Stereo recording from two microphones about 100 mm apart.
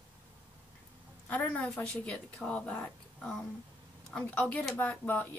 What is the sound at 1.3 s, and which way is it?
A woman's voice, 15° left (ahead or behind).